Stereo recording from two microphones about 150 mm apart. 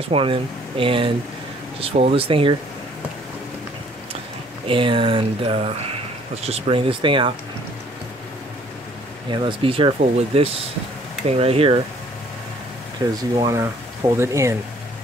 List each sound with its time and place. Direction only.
0.1 s speech: 35° right (ahead or behind)
4.6 s speech: 35° right (ahead or behind)
9.3 s speech: 35° right (ahead or behind)
13.0 s speech: 20° right (ahead or behind)